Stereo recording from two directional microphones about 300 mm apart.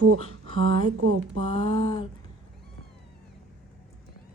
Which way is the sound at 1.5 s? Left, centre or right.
Centre.